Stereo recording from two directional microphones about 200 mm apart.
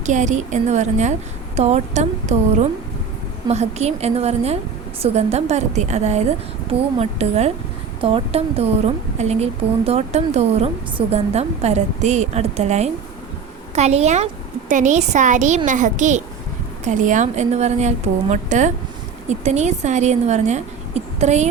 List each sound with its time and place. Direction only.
0.0 s a woman's voice: 35° right (ahead or behind)